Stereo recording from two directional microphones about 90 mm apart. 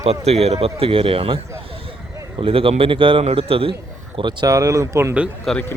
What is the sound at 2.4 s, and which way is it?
Speech, 90° right.